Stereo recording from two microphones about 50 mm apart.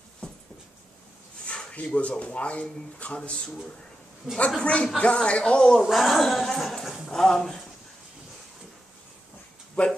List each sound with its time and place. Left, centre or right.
0.2 s dog: centre
1.4 s a sound: left
2.0 s speech: left
4.6 s speech: centre
5.8 s a woman's voice: centre
9.8 s speech: left